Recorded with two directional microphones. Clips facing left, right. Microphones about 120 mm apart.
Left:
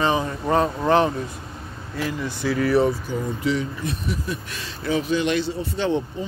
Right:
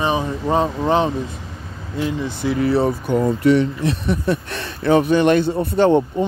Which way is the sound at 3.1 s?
65° right (ahead or behind).